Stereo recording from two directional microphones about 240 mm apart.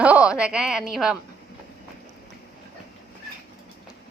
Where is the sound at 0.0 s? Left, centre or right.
Centre.